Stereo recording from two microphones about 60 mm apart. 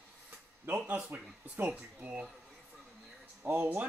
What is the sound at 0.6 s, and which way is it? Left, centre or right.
Speech, right.